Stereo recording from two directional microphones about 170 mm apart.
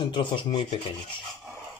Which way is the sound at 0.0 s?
30° left (ahead or behind).